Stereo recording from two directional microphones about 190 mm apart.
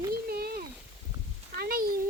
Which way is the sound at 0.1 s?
55° right (ahead or behind).